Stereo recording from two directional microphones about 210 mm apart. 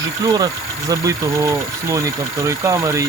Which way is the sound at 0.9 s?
15° right (ahead or behind).